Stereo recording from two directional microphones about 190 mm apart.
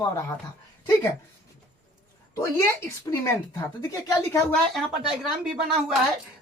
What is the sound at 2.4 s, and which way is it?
Speech, 15° left (ahead or behind).